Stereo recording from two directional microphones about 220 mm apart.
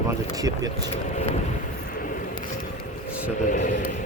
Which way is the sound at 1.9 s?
40° left (ahead or behind).